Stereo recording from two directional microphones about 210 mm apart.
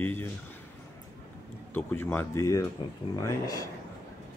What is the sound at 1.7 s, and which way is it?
A man's voice, 10° left (ahead or behind).